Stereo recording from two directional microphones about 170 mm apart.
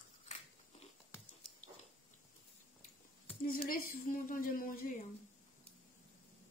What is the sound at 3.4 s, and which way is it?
A woman's voice, 60° left (ahead or behind).